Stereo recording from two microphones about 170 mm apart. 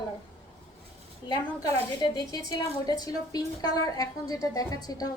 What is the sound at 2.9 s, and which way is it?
A woman's voice, 20° left (ahead or behind).